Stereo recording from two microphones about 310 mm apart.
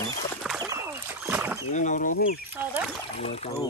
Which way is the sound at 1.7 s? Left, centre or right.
Left.